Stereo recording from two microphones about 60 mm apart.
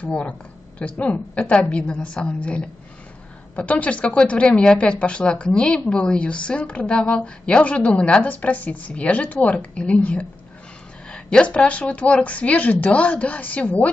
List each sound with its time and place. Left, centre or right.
0.0 s speech: centre